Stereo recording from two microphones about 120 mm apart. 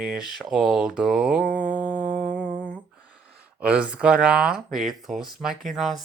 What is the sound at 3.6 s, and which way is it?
Speech, 10° right (ahead or behind).